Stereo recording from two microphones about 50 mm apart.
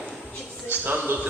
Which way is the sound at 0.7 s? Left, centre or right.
Right.